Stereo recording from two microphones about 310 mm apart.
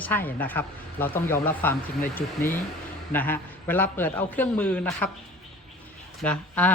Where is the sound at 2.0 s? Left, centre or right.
Left.